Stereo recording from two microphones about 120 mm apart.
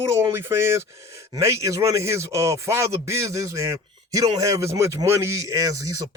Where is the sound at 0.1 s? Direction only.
20° right (ahead or behind).